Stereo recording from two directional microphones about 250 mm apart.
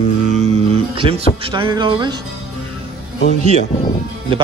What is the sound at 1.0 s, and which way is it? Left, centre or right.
Speech, right.